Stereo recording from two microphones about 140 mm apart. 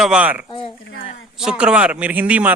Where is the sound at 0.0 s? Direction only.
10° right (ahead or behind).